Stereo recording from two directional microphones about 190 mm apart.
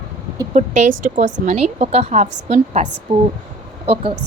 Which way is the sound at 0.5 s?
40° right (ahead or behind).